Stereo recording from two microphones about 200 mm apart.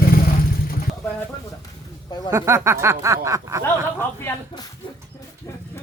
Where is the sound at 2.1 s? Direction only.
20° left (ahead or behind).